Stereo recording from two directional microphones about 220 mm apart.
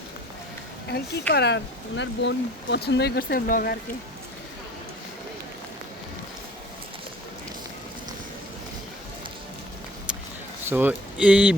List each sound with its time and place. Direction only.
0.9 s speech: 45° left (ahead or behind)
10.7 s speech: 10° right (ahead or behind)